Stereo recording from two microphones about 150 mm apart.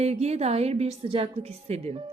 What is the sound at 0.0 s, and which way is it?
A woman's voice, 45° right (ahead or behind).